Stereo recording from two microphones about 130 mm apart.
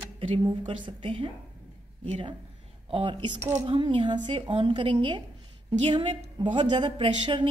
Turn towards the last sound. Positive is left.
turn(degrees=-40)  # may be behind; listen again after turning